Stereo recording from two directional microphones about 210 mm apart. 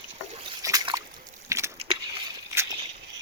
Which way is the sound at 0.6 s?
15° right (ahead or behind).